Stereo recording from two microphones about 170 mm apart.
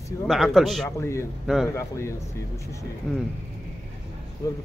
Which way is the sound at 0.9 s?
15° left (ahead or behind).